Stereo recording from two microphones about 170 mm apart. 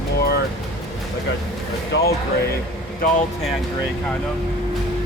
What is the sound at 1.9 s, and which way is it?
Speech, 90° left.